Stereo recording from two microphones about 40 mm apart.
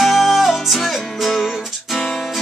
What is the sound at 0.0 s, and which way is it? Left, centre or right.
Music, centre.